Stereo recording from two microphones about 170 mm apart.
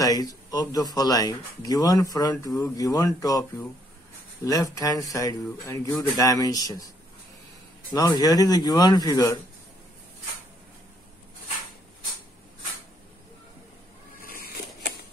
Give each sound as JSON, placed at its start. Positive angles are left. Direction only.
{"t": 0.0, "sound": "speech", "side_deg": 20}
{"t": 7.9, "sound": "speech", "side_deg": 25}
{"t": 14.2, "sound": "vehicle", "side_deg": 60}